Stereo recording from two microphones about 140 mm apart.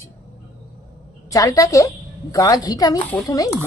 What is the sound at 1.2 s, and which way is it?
A woman's voice, 25° left (ahead or behind).